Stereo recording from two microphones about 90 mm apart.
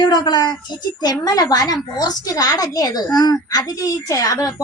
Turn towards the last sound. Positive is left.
turn(degrees=40)  # may be behind; listen again after turning